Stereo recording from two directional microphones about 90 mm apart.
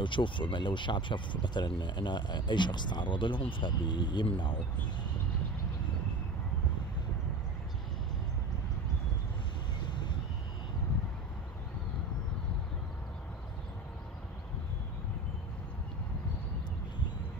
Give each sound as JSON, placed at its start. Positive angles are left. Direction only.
{"t": 0.0, "sound": "speech", "side_deg": 65}
{"t": 9.8, "sound": "vehicle", "side_deg": 55}